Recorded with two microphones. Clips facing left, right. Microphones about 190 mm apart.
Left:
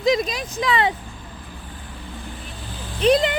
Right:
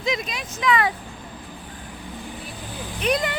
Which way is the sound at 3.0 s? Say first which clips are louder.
Left 6 dB; 30° left (ahead or behind).